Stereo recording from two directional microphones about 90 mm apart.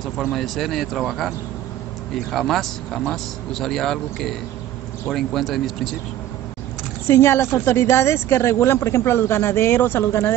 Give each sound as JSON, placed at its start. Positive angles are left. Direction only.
{"t": 0.3, "sound": "a man's voice", "side_deg": 0}
{"t": 2.3, "sound": "a man's voice", "side_deg": 0}
{"t": 7.1, "sound": "speech", "side_deg": 30}